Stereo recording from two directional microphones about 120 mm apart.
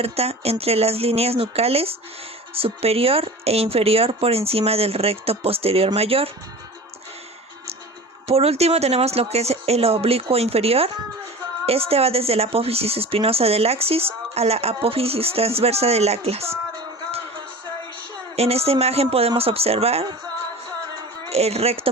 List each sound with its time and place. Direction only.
0.0 s speech: 60° right (ahead or behind)
8.3 s speech: 60° right (ahead or behind)
18.3 s speech: 60° right (ahead or behind)
21.2 s speech: 60° right (ahead or behind)